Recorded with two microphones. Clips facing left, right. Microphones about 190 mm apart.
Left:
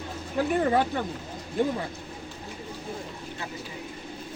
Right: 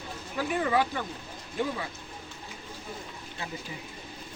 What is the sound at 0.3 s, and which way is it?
Speech, 45° left (ahead or behind).